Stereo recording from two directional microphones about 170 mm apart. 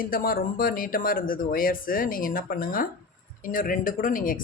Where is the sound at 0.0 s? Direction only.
60° left (ahead or behind).